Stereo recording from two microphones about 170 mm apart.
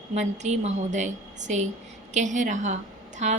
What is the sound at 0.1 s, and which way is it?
A woman's voice, 40° right (ahead or behind).